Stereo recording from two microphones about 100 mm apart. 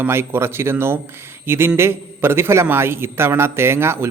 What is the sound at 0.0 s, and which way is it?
A man's voice, 25° right (ahead or behind).